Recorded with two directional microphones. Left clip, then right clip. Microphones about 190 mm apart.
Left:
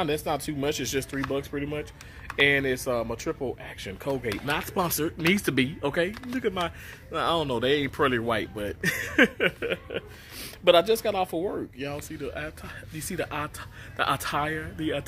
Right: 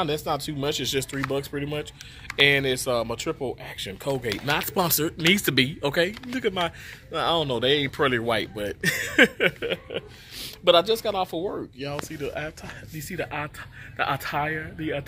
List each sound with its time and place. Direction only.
0.0 s speech: 10° left (ahead or behind)
10.4 s speech: 15° left (ahead or behind)
12.2 s speech: 15° right (ahead or behind)
13.1 s speech: 15° left (ahead or behind)